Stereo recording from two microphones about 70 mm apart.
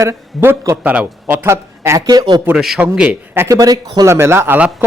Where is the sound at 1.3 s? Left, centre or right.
Right.